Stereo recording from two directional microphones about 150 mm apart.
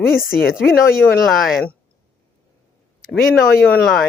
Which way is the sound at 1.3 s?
Centre (ahead or behind).